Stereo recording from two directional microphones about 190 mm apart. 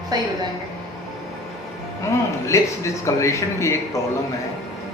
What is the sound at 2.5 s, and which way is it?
Speech, 15° left (ahead or behind).